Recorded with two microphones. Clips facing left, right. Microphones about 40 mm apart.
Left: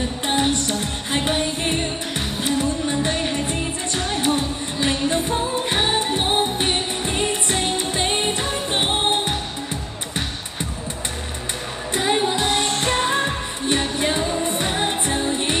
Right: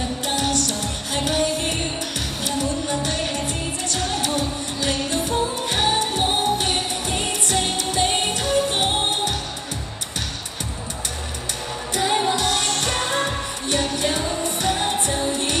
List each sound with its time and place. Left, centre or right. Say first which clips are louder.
0.3 s music: left 3 dB; left
11.9 s music of asia: left 1 dB; centre
14.4 s music: left 1 dB; left